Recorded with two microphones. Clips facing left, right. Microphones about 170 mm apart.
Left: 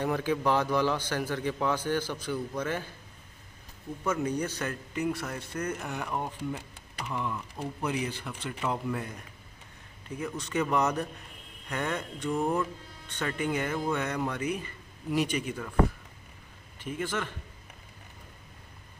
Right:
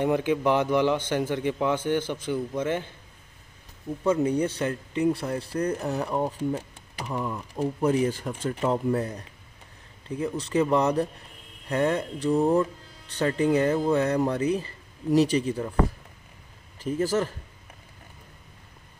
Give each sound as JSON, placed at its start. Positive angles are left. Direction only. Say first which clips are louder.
{"t": 0.0, "sound": "a man's voice", "louder": "right 5 dB", "side_deg": -20}
{"t": 4.0, "sound": "a man's voice", "louder": "right 7 dB", "side_deg": -30}
{"t": 16.8, "sound": "speech", "louder": "right 8 dB", "side_deg": -40}